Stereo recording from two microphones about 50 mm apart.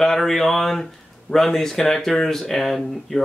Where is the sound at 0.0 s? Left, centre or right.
Centre.